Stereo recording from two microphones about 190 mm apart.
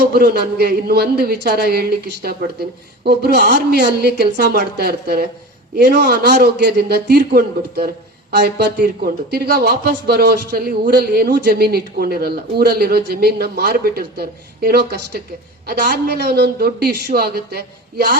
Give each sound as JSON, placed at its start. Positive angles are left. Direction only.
{"t": 0.0, "sound": "speech", "side_deg": -55}